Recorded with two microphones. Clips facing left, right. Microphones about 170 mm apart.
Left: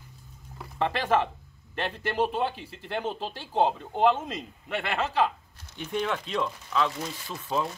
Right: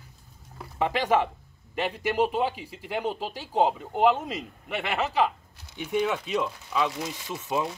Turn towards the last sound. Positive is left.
turn(degrees=-10)  # may be behind; listen again after turning